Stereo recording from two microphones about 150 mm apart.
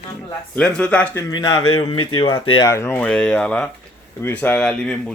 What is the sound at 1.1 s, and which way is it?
Speech, 25° left (ahead or behind).